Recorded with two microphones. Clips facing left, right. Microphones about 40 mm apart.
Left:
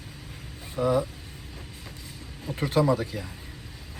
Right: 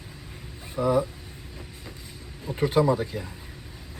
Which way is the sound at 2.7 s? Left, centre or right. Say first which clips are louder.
Even; centre.